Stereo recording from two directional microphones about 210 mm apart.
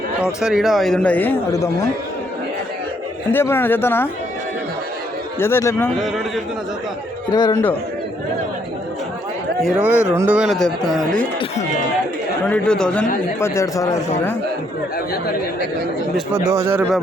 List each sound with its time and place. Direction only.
0.4 s a man's voice: centre (ahead or behind)
3.3 s speech: 10° left (ahead or behind)
5.4 s speech: 10° left (ahead or behind)
6.0 s a man's voice: centre (ahead or behind)
7.3 s a man's voice: 20° left (ahead or behind)
9.6 s a man's voice: 5° right (ahead or behind)
12.5 s a man's voice: 5° left (ahead or behind)
16.3 s speech: 15° right (ahead or behind)